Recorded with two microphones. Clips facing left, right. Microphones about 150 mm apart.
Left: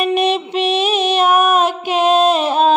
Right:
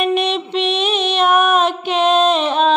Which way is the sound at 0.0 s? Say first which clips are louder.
Left 2 dB; 10° left (ahead or behind).